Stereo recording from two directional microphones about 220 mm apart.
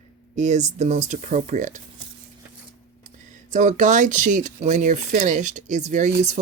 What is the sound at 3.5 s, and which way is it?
Speech, 35° right (ahead or behind).